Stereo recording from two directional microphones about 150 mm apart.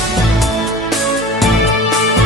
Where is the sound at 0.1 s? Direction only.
Centre (ahead or behind).